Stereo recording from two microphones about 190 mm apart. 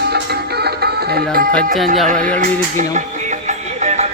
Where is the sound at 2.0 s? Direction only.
45° right (ahead or behind).